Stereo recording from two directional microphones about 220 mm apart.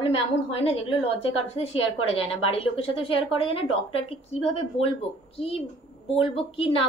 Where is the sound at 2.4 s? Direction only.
25° left (ahead or behind).